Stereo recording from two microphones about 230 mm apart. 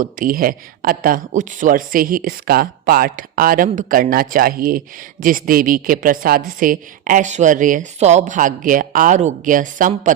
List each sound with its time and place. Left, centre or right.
0.0 s a woman's voice: right